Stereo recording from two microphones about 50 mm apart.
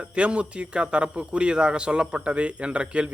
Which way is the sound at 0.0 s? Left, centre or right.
Right.